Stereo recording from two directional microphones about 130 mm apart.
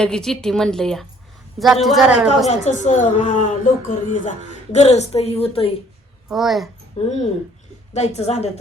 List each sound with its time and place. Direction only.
0.0 s a woman's voice: 5° left (ahead or behind)
2.5 s speech: 65° left (ahead or behind); by 4.2 s 85° left
4.7 s a woman's voice: 55° left (ahead or behind)
6.2 s a child's voice: centre (ahead or behind)
7.0 s a woman's voice: 55° left (ahead or behind)